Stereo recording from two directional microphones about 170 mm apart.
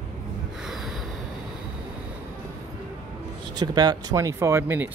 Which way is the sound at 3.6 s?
25° right (ahead or behind).